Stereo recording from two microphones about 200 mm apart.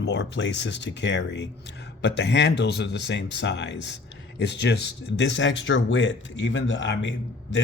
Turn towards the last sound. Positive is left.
turn(degrees=65)  # may be behind; listen again after turning